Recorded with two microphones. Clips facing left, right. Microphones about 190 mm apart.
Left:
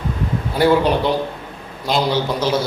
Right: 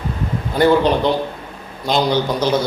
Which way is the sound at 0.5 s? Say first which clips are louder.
Right 1 dB; 10° left (ahead or behind).